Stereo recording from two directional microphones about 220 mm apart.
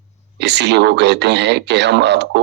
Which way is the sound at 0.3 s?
50° right (ahead or behind).